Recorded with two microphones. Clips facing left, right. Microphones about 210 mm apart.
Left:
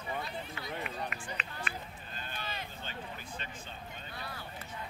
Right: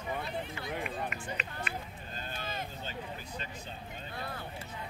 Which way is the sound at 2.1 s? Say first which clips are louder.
Right 3 dB; 45° right (ahead or behind).